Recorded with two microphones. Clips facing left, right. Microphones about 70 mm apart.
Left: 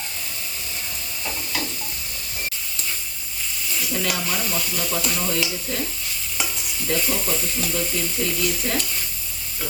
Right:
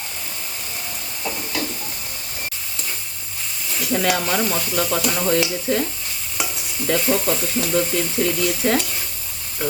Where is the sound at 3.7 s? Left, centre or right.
Right.